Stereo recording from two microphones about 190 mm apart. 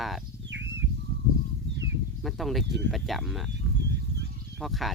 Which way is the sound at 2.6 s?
70° right (ahead or behind).